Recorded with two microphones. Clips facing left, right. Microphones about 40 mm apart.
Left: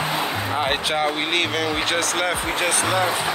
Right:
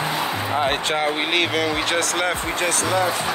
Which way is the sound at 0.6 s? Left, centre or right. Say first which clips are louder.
Right 1 dB; centre.